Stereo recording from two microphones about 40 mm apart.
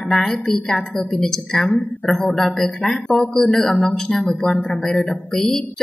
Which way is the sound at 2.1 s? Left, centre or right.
Left.